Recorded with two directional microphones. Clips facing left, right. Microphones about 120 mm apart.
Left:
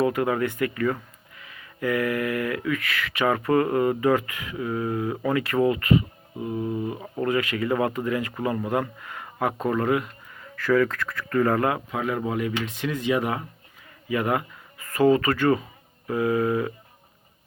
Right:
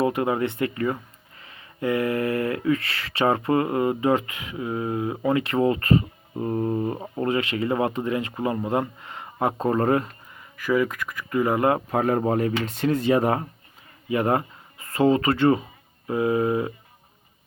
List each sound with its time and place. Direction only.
0.0 s speech: 25° right (ahead or behind)
10.5 s speech: 15° right (ahead or behind)
11.7 s speech: 45° right (ahead or behind); by 16.7 s 25° right (ahead or behind)